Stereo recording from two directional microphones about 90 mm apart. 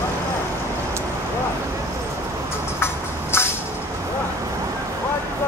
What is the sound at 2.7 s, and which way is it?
Vehicle, 25° left (ahead or behind).